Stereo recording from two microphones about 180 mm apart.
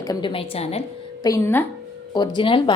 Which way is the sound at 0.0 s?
25° left (ahead or behind).